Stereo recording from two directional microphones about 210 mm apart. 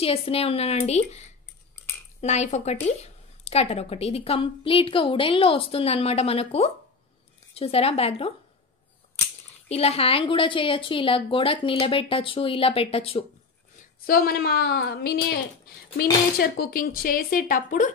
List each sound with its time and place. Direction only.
0.0 s a woman's voice: 25° left (ahead or behind)
9.7 s a woman's voice: 30° left (ahead or behind)
14.0 s speech: 45° left (ahead or behind)